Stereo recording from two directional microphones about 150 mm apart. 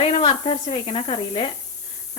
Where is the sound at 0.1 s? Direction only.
35° left (ahead or behind).